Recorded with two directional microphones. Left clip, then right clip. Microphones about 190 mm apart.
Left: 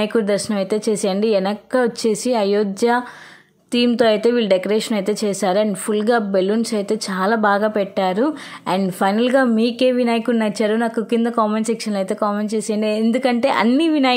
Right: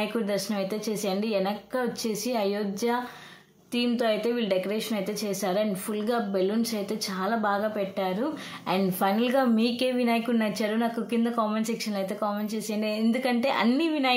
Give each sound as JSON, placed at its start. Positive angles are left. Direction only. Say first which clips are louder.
{"t": 0.0, "sound": "a woman's voice", "louder": "left 10 dB", "side_deg": 40}